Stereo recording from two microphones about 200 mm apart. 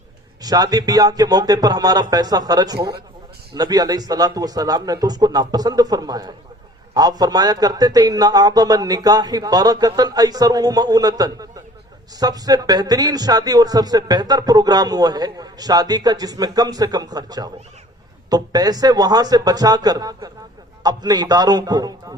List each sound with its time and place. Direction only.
0.4 s a man's voice: 20° right (ahead or behind)